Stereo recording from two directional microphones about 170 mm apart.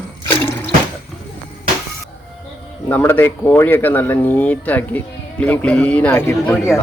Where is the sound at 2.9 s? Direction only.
10° left (ahead or behind).